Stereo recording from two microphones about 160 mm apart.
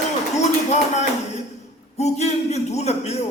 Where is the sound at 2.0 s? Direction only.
45° left (ahead or behind).